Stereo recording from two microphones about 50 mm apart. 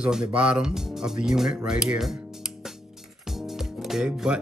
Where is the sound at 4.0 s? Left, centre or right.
Centre.